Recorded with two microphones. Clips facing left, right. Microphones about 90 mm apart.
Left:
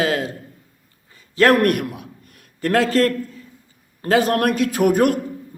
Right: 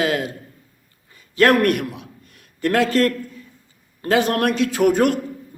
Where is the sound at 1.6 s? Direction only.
45° left (ahead or behind).